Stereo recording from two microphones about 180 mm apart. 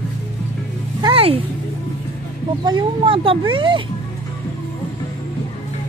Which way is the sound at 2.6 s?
25° right (ahead or behind).